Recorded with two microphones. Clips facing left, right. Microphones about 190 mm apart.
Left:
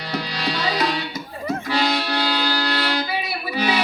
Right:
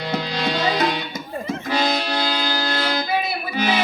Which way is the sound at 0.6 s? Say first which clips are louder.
Even; 50° right (ahead or behind).